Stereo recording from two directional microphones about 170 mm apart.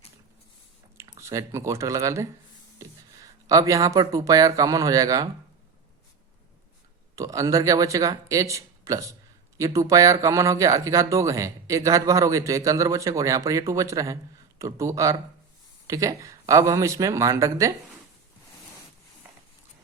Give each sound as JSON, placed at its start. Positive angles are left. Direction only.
{"t": 0.9, "sound": "speech", "side_deg": -15}
{"t": 3.4, "sound": "speech", "side_deg": -20}
{"t": 7.2, "sound": "speech", "side_deg": -20}